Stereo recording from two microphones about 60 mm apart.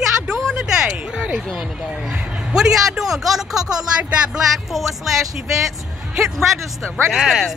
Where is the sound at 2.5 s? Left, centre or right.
Centre.